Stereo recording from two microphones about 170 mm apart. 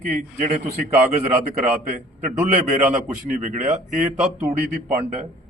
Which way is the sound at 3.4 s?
45° right (ahead or behind).